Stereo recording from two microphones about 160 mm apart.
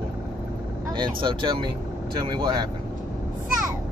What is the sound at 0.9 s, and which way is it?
Speech, 30° right (ahead or behind).